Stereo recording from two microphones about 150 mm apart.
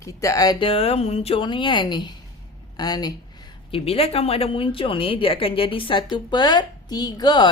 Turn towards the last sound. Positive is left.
turn(degrees=30)  # may be behind; listen again after turning